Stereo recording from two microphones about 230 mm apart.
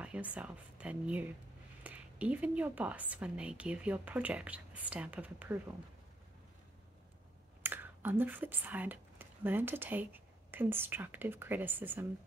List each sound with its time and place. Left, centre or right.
0.0 s a woman's voice: centre
7.6 s speech: centre